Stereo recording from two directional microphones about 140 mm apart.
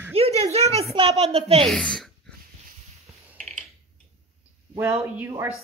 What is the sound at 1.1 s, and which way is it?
Speech, 45° right (ahead or behind).